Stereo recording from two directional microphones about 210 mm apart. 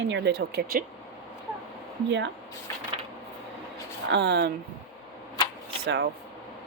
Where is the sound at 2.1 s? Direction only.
60° right (ahead or behind).